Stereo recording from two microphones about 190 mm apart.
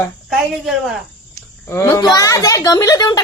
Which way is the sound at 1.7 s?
15° left (ahead or behind).